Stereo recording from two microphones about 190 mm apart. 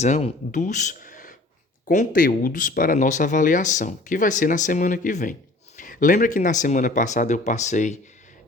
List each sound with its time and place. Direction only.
0.0 s speech: 35° left (ahead or behind)